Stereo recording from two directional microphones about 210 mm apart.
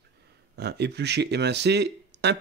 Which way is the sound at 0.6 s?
50° right (ahead or behind).